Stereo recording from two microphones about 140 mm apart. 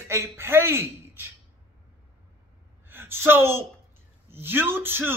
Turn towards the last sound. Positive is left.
turn(degrees=-15)  # may be behind; listen again after turning